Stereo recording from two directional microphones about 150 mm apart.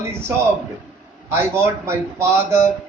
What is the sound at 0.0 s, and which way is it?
A man's voice, 15° right (ahead or behind).